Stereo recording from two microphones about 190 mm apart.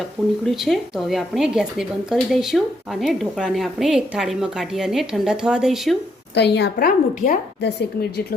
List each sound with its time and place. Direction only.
0.4 s speech: centre (ahead or behind)
6.3 s a woman's voice: 60° left (ahead or behind)